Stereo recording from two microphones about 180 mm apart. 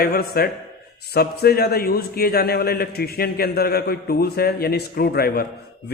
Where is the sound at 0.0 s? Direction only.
55° left (ahead or behind).